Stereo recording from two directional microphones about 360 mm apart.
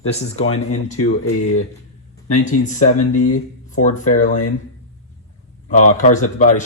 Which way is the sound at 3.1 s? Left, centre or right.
Left.